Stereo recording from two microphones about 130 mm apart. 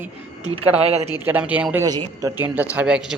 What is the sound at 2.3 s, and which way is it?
Speech, 15° right (ahead or behind).